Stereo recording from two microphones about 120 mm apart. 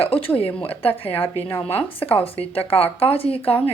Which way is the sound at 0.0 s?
50° left (ahead or behind).